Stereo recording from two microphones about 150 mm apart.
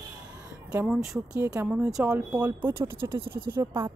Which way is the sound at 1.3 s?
20° right (ahead or behind).